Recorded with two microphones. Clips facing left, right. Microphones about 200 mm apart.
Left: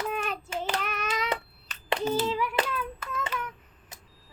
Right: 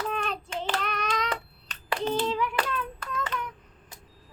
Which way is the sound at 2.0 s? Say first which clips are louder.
Right 1 dB; 5° left (ahead or behind).